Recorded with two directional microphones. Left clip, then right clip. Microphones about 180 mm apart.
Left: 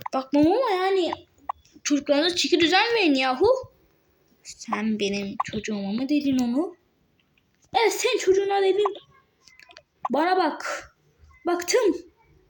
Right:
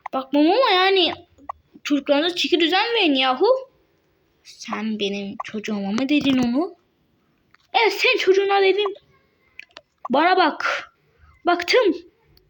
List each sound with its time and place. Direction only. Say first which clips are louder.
0.0 s a woman's voice: right 2 dB; centre (ahead or behind)
7.7 s speech: right 4 dB; 5° right (ahead or behind)
9.6 s a sound: left 3 dB; centre (ahead or behind)
11.4 s speech: right 5 dB; 5° right (ahead or behind)